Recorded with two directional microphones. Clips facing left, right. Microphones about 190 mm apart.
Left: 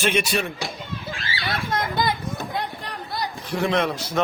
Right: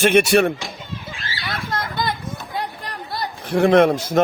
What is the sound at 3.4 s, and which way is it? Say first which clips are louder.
Speech: right 9 dB; 55° right (ahead or behind).